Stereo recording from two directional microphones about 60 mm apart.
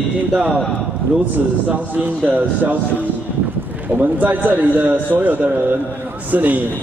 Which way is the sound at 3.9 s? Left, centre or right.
Right.